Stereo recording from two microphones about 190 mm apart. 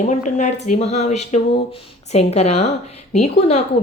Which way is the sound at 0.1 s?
40° left (ahead or behind).